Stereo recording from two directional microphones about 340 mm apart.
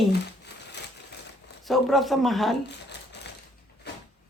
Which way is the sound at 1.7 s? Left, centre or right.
Centre.